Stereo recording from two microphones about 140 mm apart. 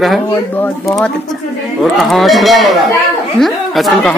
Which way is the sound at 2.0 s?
Centre (ahead or behind).